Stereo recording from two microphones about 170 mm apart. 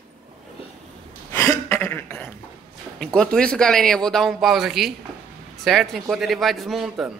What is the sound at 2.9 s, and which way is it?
A man's voice, 5° left (ahead or behind).